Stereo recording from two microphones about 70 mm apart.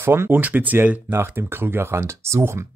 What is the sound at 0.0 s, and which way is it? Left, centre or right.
Speech, right.